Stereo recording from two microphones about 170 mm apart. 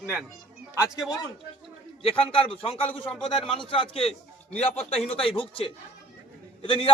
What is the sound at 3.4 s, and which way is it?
Speech, 5° left (ahead or behind).